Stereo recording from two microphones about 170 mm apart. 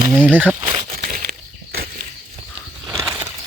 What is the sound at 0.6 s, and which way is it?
Crumpling, 35° right (ahead or behind).